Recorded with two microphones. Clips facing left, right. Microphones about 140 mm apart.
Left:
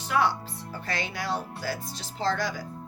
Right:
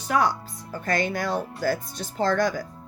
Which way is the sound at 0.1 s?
45° right (ahead or behind).